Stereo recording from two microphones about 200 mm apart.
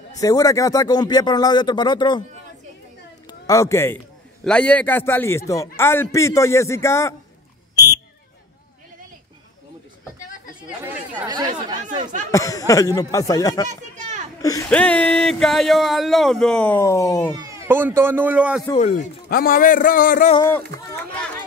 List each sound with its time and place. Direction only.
0.2 s speech: 15° left (ahead or behind)
3.3 s a man's voice: 15° left (ahead or behind)
7.7 s a sound: 20° left (ahead or behind)
11.2 s speech: 20° right (ahead or behind)
11.8 s speech: 35° right (ahead or behind)
12.3 s a man's voice: 15° left (ahead or behind)
13.7 s a child's voice: 35° right (ahead or behind)
14.7 s speech: 5° left (ahead or behind)
17.4 s speech: 15° right (ahead or behind)
18.8 s speech: 40° left (ahead or behind)